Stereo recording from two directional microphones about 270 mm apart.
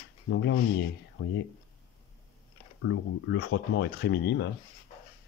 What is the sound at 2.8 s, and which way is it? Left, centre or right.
Speech, left.